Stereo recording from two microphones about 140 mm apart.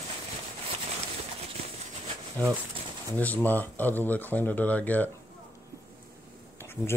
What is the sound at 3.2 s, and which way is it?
Speech, 10° left (ahead or behind).